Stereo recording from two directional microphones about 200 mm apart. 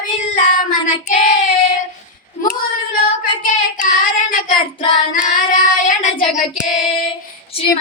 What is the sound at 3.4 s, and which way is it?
Child singing, 40° left (ahead or behind).